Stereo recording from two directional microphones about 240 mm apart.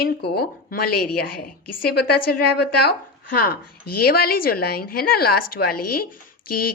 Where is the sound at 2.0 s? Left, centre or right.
Left.